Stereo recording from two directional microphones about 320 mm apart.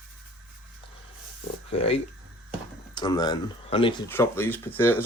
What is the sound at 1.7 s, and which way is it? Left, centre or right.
Speech, centre.